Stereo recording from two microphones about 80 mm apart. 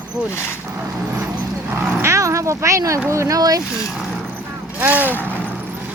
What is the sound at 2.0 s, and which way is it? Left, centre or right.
Cat, right.